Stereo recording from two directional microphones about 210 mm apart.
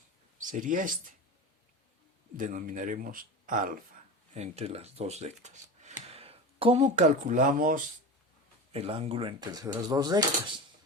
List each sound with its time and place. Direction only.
0.5 s speech: 40° right (ahead or behind)
2.3 s speech: 40° right (ahead or behind)
4.4 s speech: 30° right (ahead or behind)
8.7 s speech: 25° right (ahead or behind)